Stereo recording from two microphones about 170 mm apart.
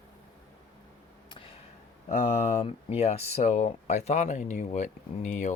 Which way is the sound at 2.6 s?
40° left (ahead or behind).